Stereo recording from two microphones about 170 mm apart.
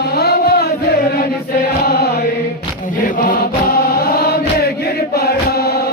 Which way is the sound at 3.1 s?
50° left (ahead or behind).